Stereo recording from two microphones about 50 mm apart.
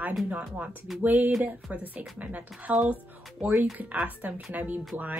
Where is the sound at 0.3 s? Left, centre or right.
Right.